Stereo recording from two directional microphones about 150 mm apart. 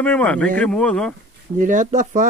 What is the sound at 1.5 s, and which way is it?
Speech, 55° right (ahead or behind).